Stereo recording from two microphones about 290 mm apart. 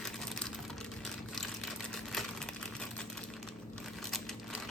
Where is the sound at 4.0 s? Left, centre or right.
Centre.